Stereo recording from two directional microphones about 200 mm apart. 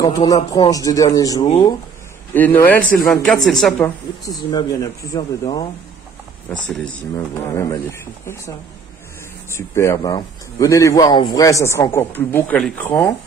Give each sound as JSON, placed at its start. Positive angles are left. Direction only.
{"t": 0.0, "sound": "a man's voice", "side_deg": 15}
{"t": 4.5, "sound": "a man's voice", "side_deg": 20}
{"t": 6.7, "sound": "a man's voice", "side_deg": 5}
{"t": 9.6, "sound": "a man's voice", "side_deg": 15}